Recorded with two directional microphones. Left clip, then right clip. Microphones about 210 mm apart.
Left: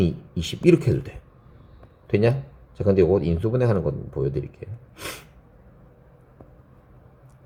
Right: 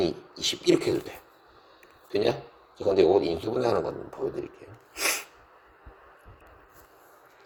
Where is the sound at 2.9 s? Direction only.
20° right (ahead or behind).